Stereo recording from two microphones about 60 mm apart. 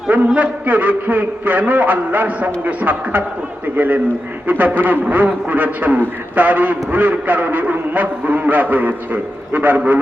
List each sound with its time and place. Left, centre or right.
0.3 s a man's voice: right